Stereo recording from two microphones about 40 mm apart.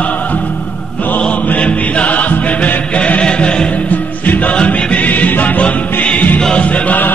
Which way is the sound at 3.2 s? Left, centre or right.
Left.